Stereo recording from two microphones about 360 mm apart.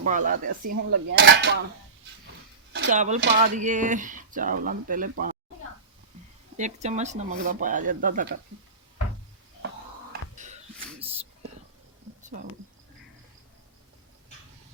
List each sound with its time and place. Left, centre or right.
0.0 s speech: right
0.4 s speech: right
1.1 s speech: right
2.9 s speech: centre
6.6 s speech: centre
10.1 s a sound: centre